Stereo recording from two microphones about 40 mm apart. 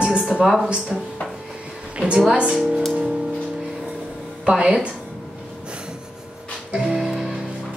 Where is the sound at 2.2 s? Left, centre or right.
Right.